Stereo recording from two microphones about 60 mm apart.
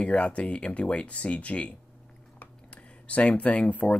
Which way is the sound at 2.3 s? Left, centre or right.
Left.